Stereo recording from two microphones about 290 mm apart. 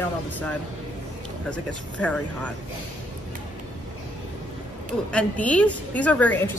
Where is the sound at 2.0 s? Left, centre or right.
Centre.